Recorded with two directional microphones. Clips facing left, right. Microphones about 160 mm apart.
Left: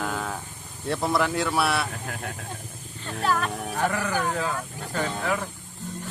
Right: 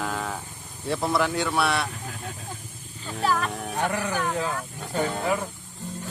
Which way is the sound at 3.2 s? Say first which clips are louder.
Even; centre (ahead or behind).